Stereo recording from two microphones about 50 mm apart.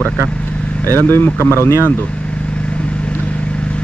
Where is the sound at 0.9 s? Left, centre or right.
Left.